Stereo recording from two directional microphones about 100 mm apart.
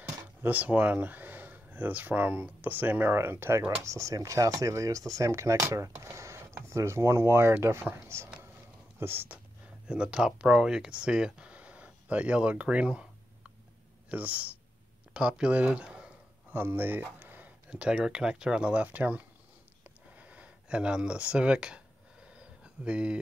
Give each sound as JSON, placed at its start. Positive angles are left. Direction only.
{"t": 0.4, "sound": "speech", "side_deg": -15}
{"t": 9.8, "sound": "speech", "side_deg": -10}
{"t": 19.8, "sound": "a sound", "side_deg": -15}